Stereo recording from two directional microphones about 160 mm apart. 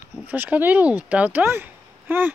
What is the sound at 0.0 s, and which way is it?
Speech, 10° right (ahead or behind).